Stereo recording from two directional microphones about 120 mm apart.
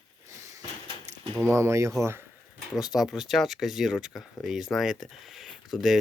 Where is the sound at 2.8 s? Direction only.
5° right (ahead or behind).